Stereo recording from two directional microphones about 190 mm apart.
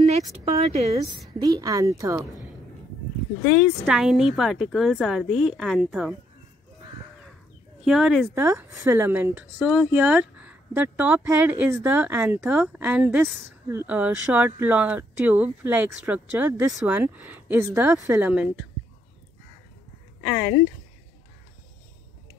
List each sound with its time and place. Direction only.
0.5 s speech: 35° right (ahead or behind)
1.4 s speech: 20° right (ahead or behind)
3.4 s speech: centre (ahead or behind)
7.8 s speech: centre (ahead or behind)